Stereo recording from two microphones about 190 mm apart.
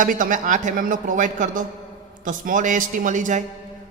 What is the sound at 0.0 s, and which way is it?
A man's voice, 45° right (ahead or behind).